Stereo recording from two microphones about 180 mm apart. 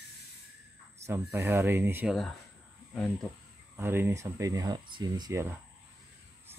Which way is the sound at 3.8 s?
15° right (ahead or behind).